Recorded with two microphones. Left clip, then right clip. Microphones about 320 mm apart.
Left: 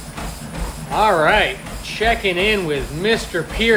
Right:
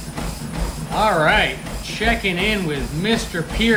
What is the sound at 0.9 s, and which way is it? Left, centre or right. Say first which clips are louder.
Speech: left 2 dB; left.